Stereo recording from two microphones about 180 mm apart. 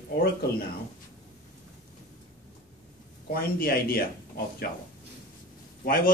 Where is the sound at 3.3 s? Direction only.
55° left (ahead or behind).